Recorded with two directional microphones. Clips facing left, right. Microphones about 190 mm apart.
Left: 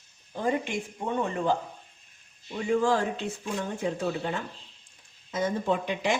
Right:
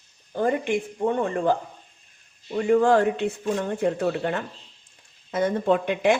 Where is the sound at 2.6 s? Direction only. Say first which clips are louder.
Right 6 dB; 60° right (ahead or behind).